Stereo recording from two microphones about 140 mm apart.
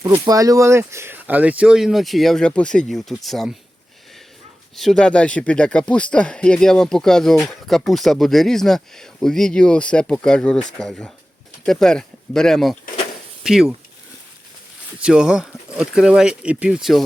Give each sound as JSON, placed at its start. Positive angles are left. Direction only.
{"t": 0.0, "sound": "speech", "side_deg": -35}
{"t": 0.3, "sound": "speech", "side_deg": -25}
{"t": 4.7, "sound": "speech", "side_deg": 0}
{"t": 14.9, "sound": "speech", "side_deg": -5}